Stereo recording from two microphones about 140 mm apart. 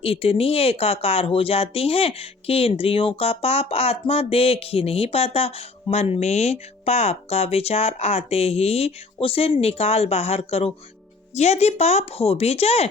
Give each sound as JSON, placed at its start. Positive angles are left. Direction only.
{"t": 0.0, "sound": "speech", "side_deg": 45}